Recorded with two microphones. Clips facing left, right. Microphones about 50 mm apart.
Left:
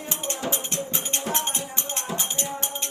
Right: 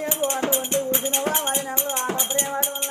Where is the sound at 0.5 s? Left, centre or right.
Centre.